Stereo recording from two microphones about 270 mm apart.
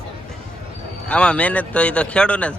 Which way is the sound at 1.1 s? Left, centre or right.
Centre.